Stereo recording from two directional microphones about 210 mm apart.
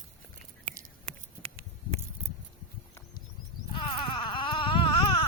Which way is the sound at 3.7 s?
25° left (ahead or behind).